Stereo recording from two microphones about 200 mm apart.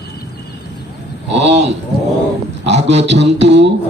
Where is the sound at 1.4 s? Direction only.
30° right (ahead or behind).